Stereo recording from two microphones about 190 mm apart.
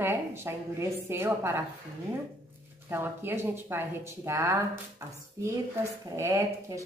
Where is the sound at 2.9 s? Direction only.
10° right (ahead or behind).